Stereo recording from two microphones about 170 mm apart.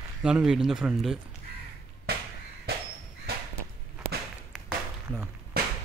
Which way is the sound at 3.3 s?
70° right (ahead or behind).